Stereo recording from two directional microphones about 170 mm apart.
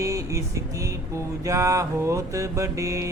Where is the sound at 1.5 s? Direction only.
20° right (ahead or behind).